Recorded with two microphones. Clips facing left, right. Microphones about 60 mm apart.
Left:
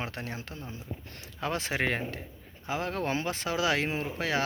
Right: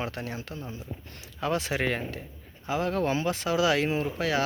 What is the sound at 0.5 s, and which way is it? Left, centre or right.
Speech, right.